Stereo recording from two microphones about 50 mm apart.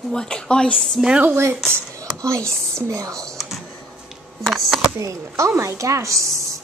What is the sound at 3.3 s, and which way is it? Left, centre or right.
Computer keyboard, centre.